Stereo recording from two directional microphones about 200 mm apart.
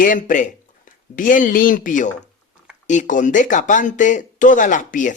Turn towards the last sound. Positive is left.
turn(degrees=40)  # may be behind; listen again after turning